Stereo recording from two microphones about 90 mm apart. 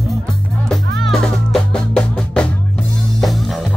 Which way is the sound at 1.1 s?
5° left (ahead or behind).